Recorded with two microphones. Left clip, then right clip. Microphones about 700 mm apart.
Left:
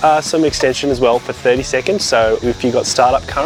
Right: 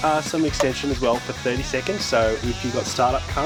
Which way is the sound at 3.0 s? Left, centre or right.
Left.